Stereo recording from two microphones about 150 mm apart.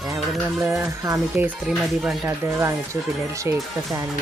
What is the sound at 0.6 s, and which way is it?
Speech, 20° right (ahead or behind).